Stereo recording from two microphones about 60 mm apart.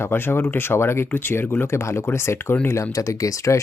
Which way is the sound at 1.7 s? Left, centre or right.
Left.